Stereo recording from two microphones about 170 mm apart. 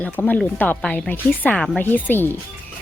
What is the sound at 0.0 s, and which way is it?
A woman's voice, 10° left (ahead or behind).